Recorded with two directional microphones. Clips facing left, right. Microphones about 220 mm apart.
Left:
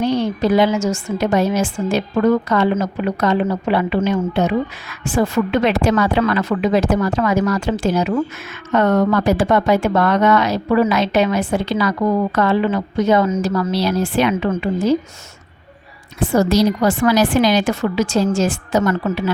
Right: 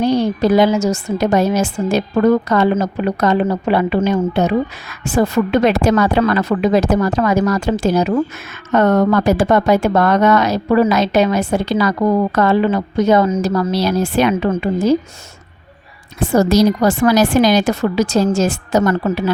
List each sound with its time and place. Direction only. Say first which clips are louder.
0.0 s a woman's voice: right 3 dB; 40° right (ahead or behind)
16.2 s a woman's voice: right 2 dB; 40° right (ahead or behind)